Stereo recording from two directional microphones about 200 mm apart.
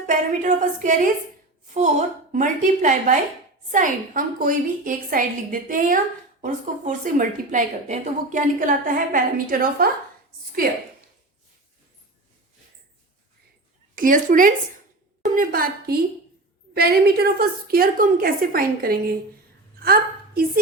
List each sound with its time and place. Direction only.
0.0 s a woman's voice: 40° right (ahead or behind)
13.9 s a woman's voice: 40° right (ahead or behind)
19.8 s a sound: 50° right (ahead or behind)